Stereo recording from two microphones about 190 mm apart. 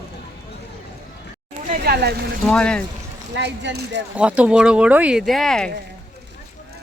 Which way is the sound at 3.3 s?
65° right (ahead or behind).